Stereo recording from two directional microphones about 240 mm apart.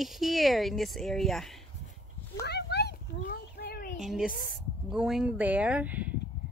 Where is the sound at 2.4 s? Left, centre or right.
Left.